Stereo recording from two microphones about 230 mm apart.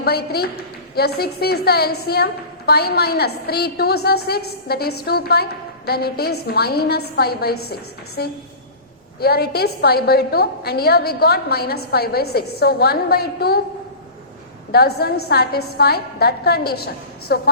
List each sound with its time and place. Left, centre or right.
0.0 s a woman's voice: left
14.7 s a woman's voice: left